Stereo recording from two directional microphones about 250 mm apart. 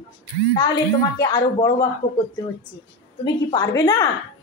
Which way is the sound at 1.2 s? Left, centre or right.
Centre.